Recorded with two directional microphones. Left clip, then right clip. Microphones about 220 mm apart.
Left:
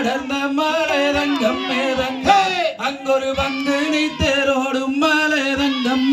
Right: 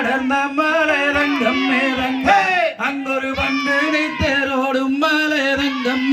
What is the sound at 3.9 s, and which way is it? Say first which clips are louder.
Music: even; 50° left (ahead or behind).